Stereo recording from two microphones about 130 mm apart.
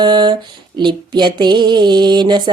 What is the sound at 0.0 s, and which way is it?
Female singing, 35° right (ahead or behind).